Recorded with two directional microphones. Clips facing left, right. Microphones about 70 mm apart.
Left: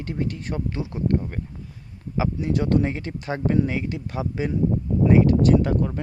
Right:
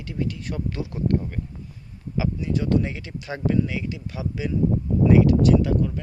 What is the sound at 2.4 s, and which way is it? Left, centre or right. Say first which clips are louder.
Speech: left 2 dB; left.